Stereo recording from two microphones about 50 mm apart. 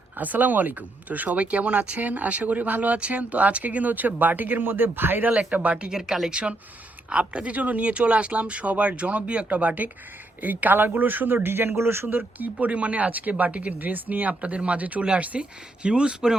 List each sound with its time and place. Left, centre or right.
0.2 s speech: right
5.3 s speech: right
5.9 s speech: centre
6.3 s speech: right
11.4 s speech: right
12.1 s speech: right; by 16.3 s centre